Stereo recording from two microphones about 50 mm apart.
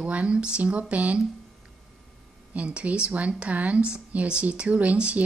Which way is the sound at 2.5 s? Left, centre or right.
Right.